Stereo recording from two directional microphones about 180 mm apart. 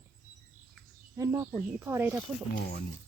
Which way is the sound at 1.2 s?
15° right (ahead or behind).